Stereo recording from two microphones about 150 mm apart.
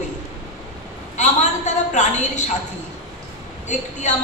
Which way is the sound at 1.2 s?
50° left (ahead or behind).